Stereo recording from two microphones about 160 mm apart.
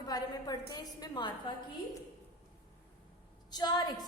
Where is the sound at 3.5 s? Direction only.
25° left (ahead or behind).